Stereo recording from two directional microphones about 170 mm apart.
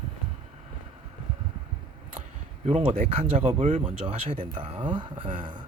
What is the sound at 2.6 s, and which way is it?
Speech, 35° right (ahead or behind).